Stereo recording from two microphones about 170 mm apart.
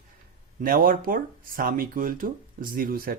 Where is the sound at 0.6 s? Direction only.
55° right (ahead or behind).